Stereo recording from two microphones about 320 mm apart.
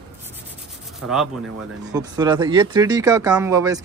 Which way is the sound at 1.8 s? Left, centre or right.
Centre.